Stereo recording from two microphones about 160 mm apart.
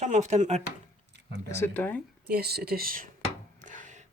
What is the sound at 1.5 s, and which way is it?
Speech, 15° left (ahead or behind).